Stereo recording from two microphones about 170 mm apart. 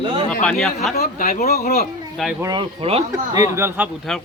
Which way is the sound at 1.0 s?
55° left (ahead or behind).